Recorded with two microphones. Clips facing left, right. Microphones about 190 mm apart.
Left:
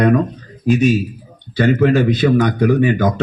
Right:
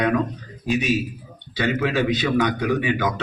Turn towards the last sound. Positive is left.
turn(degrees=45)  # may be behind; listen again after turning